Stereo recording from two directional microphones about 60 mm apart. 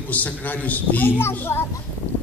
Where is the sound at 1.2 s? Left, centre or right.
Left.